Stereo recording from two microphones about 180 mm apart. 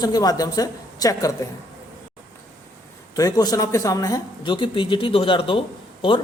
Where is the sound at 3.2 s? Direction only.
20° left (ahead or behind).